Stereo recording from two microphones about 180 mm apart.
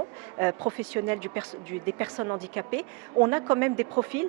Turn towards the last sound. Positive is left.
turn(degrees=-15)  # may be behind; listen again after turning